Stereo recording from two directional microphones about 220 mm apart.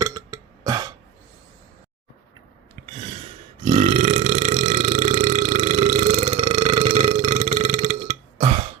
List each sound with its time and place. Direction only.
0.0 s burping: 15° right (ahead or behind)
3.7 s burping: 35° right (ahead or behind)